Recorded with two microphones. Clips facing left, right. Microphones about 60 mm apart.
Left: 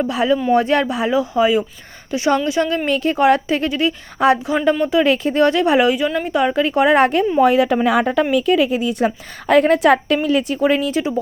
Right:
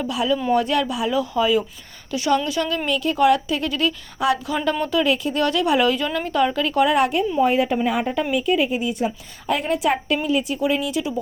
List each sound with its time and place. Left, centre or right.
0.0 s a woman's voice: left
3.7 s speech: left
5.0 s a woman's voice: left
5.8 s speech: centre
7.1 s speech: left
7.4 s a woman's voice: left
10.6 s speech: left